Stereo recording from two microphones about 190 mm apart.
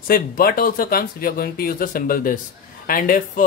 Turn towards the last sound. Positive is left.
turn(degrees=45)  # may be behind; listen again after turning